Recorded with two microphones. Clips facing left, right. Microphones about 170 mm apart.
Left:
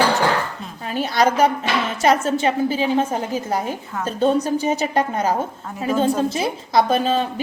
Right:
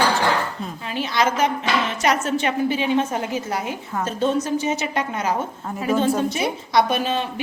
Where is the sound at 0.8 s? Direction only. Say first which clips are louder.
Left 4 dB; 45° left (ahead or behind).